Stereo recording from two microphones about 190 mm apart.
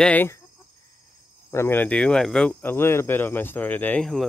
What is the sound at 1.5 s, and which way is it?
Speech, 10° left (ahead or behind).